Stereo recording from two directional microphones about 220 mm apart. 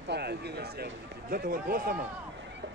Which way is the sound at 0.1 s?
50° right (ahead or behind).